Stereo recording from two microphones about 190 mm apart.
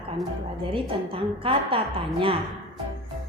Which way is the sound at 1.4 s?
30° right (ahead or behind).